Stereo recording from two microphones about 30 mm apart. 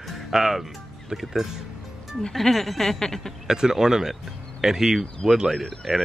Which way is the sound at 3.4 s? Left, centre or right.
Right.